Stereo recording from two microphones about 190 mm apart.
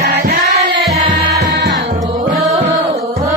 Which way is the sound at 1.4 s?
60° right (ahead or behind).